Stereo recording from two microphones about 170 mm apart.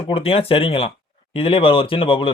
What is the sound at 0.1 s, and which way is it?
A man's voice, 35° left (ahead or behind).